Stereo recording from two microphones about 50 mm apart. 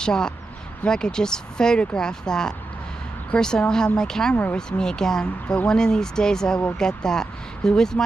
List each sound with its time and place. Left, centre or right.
0.0 s speech: centre